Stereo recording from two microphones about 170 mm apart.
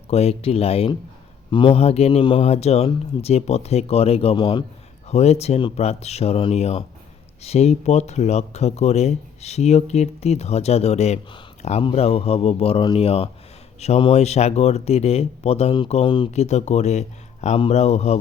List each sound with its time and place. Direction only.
0.1 s speech: 35° left (ahead or behind)
5.0 s speech: 40° left (ahead or behind)